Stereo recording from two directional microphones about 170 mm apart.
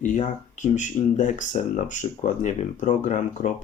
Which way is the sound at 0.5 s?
45° left (ahead or behind).